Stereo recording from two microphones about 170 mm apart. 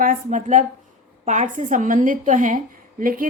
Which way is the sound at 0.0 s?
50° right (ahead or behind).